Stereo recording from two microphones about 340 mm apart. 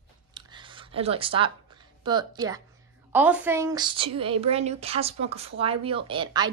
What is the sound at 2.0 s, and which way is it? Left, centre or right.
A woman's voice, centre.